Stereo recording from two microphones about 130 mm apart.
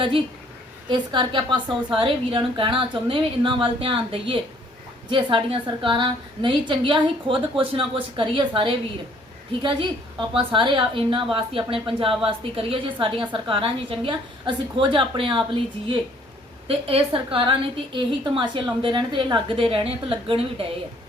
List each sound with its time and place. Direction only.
0.9 s a woman's voice: 40° right (ahead or behind)
16.6 s a woman's voice: 45° right (ahead or behind)